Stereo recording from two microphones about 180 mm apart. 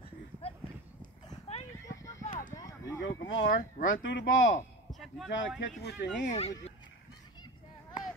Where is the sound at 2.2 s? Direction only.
50° left (ahead or behind).